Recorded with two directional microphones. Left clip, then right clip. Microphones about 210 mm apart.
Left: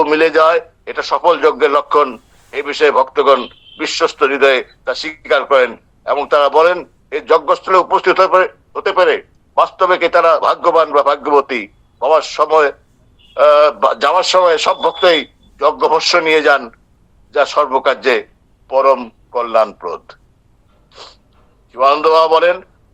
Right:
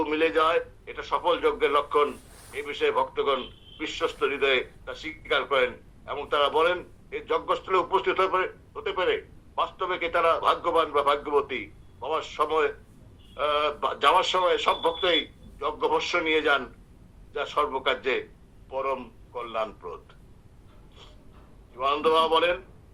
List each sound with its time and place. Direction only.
0.0 s a man's voice: 50° left (ahead or behind)
21.7 s a man's voice: 55° left (ahead or behind)